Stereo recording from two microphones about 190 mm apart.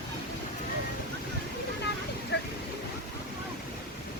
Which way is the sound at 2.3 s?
65° left (ahead or behind).